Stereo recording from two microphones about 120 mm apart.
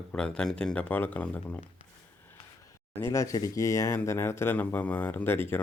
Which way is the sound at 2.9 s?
20° left (ahead or behind).